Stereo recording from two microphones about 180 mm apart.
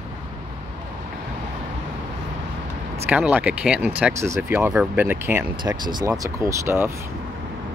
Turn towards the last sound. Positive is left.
turn(degrees=-15)  # may be behind; listen again after turning